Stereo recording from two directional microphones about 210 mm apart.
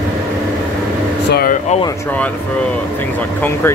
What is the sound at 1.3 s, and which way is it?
Air conditioning, 45° left (ahead or behind).